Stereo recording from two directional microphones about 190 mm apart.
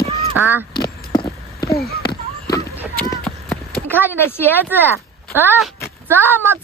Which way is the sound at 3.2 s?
5° left (ahead or behind).